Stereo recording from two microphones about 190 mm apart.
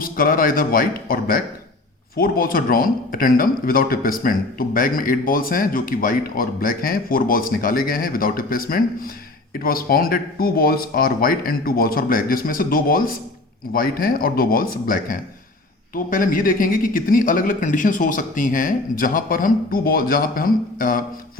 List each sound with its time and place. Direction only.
0.0 s a man's voice: 50° left (ahead or behind)